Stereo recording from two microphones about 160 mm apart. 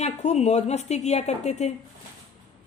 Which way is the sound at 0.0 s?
45° left (ahead or behind).